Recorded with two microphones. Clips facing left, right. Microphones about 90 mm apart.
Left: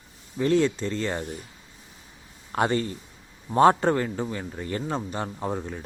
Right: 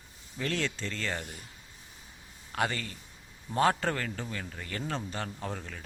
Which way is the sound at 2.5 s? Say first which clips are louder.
Left 8 dB; 30° left (ahead or behind).